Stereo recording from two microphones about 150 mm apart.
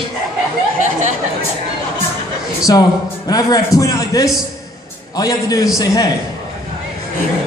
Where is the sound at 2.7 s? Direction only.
25° left (ahead or behind).